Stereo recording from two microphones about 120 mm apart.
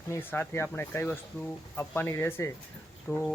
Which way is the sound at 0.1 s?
15° left (ahead or behind).